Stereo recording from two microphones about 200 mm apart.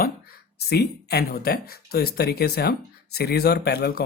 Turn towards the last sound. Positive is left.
turn(degrees=55)  # may be behind; listen again after turning